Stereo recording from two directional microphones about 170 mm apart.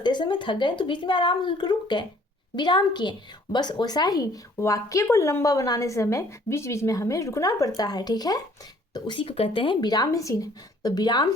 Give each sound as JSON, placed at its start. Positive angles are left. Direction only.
{"t": 0.0, "sound": "a woman's voice", "side_deg": 25}